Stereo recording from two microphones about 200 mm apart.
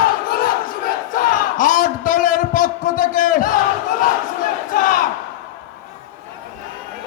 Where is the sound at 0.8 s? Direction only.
40° left (ahead or behind).